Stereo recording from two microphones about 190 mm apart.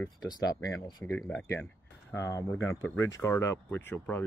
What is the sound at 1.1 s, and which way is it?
Speech, 5° left (ahead or behind).